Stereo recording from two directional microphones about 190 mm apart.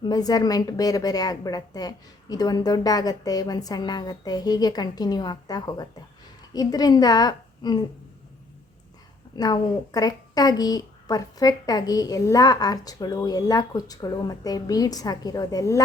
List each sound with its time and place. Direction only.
0.0 s a woman's voice: 20° left (ahead or behind)
9.4 s a woman's voice: 20° left (ahead or behind)